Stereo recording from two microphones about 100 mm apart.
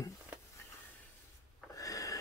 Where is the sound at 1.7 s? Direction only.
35° left (ahead or behind).